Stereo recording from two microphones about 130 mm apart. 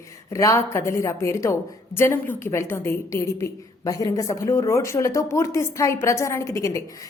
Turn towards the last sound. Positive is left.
turn(degrees=25)  # may be behind; listen again after turning